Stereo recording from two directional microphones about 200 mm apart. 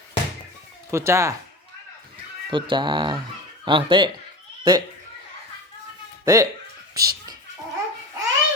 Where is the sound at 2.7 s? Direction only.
25° right (ahead or behind).